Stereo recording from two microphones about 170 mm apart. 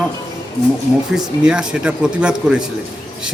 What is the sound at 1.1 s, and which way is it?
Speech, 5° right (ahead or behind).